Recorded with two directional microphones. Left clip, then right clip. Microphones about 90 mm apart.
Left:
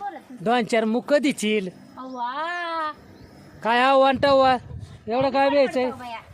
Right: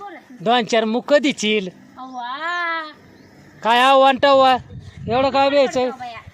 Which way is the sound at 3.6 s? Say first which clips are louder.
Right 5 dB; 15° right (ahead or behind).